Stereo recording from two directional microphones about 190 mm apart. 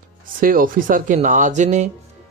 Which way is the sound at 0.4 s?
50° right (ahead or behind).